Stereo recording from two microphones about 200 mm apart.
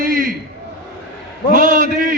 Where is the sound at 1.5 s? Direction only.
40° right (ahead or behind).